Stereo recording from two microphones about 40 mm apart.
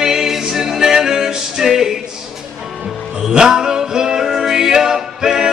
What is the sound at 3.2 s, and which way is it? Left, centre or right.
Music, centre.